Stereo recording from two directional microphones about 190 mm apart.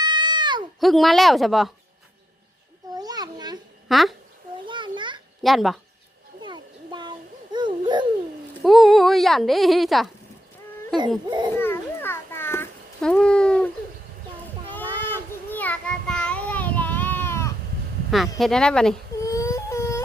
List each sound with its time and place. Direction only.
0.0 s wail: 25° right (ahead or behind)
0.8 s speech: centre (ahead or behind)
2.9 s a sound: 20° right (ahead or behind)
3.8 s a child's voice: centre (ahead or behind)
4.6 s a sound: 25° right (ahead or behind)
5.4 s speech: centre (ahead or behind)
6.4 s a sound: 25° right (ahead or behind)
7.5 s babbling: 25° right (ahead or behind)
8.6 s speech: centre (ahead or behind)
11.3 s a child's voice: 25° right (ahead or behind)
11.5 s a sound: 10° left (ahead or behind)
14.8 s child singing: 10° left (ahead or behind)
18.1 s speech: centre (ahead or behind)
19.2 s whimper: 15° left (ahead or behind)